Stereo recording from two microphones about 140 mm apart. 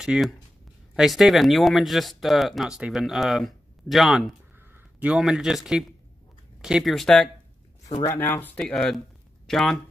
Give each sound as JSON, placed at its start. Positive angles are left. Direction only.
{"t": 0.0, "sound": "speech", "side_deg": -5}
{"t": 8.0, "sound": "speech", "side_deg": 15}